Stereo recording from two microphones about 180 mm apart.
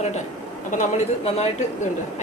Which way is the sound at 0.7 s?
40° left (ahead or behind).